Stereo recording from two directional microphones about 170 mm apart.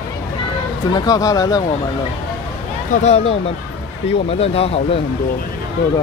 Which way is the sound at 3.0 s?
40° left (ahead or behind).